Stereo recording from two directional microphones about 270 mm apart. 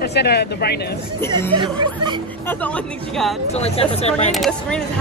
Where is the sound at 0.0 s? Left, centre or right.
Left.